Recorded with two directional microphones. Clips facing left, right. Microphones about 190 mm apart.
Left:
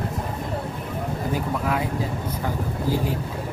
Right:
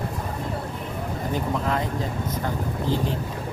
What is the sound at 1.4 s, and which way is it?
Speech, 5° left (ahead or behind).